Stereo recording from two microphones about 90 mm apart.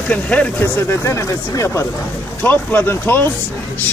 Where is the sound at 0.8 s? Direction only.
30° left (ahead or behind).